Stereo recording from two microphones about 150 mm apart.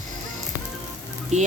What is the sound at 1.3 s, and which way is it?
Speech, 50° right (ahead or behind).